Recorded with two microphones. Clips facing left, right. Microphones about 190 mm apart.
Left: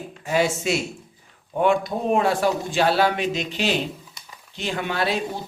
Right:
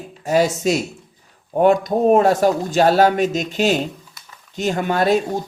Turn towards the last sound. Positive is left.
turn(degrees=-45)  # may be behind; listen again after turning